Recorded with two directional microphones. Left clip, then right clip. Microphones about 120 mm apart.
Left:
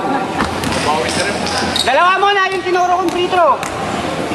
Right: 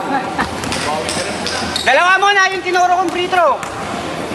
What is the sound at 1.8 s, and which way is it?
Speech, 30° right (ahead or behind).